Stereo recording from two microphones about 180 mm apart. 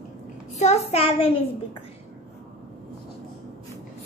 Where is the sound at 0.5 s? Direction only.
40° left (ahead or behind).